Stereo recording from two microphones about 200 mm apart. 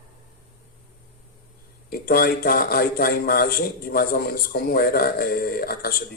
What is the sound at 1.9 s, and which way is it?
Speech, 50° left (ahead or behind).